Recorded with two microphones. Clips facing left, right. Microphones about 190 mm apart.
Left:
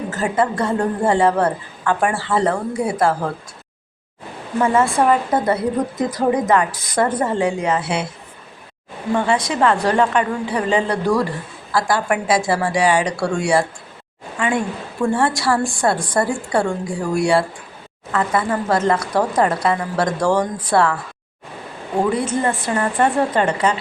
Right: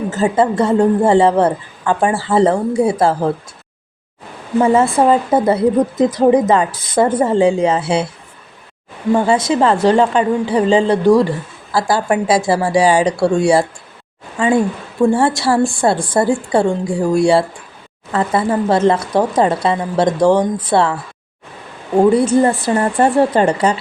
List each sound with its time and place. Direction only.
0.1 s a woman's voice: 25° right (ahead or behind)
4.6 s a woman's voice: 25° right (ahead or behind)
9.1 s a woman's voice: 30° right (ahead or behind)
22.0 s a woman's voice: 35° right (ahead or behind)